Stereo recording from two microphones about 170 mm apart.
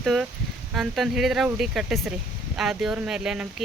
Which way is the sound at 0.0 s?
Centre (ahead or behind).